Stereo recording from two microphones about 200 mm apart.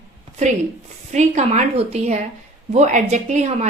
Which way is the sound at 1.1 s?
35° right (ahead or behind).